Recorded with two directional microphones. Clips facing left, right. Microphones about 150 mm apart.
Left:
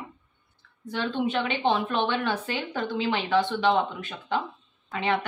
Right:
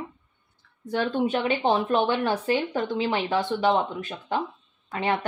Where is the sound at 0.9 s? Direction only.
45° right (ahead or behind).